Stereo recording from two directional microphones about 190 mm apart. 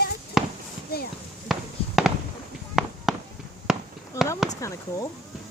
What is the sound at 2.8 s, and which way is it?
Fireworks, centre (ahead or behind).